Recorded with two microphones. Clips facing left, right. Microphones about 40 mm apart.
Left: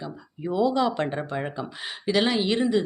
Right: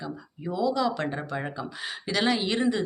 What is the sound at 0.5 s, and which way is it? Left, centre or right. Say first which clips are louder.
Speech: left 3 dB; left.